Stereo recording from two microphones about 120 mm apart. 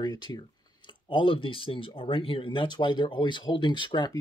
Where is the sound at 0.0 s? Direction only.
35° left (ahead or behind).